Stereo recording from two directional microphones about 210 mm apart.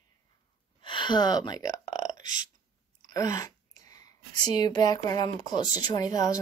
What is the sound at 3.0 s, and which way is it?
A woman's voice, 15° left (ahead or behind).